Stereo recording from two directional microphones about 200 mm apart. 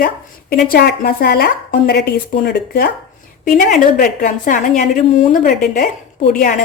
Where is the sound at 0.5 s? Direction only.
50° left (ahead or behind).